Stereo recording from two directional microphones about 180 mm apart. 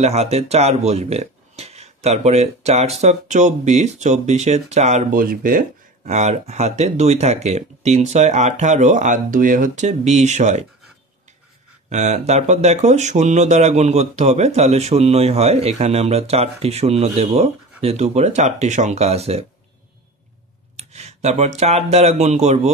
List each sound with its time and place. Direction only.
0.0 s speech: 35° right (ahead or behind)
5.2 s speech: 50° right (ahead or behind)
6.0 s speech: 40° right (ahead or behind)
11.9 s speech: 40° right (ahead or behind)
20.7 s speech: 40° right (ahead or behind)